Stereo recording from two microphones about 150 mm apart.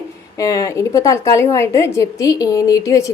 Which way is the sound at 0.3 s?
20° left (ahead or behind).